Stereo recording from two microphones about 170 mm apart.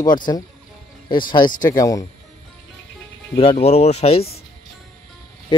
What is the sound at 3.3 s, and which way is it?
Speech, 35° left (ahead or behind).